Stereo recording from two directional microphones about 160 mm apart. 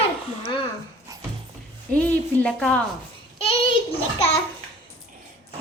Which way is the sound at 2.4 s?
5° left (ahead or behind).